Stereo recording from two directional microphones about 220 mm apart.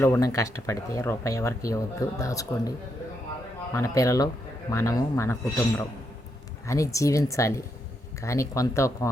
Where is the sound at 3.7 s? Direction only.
15° left (ahead or behind).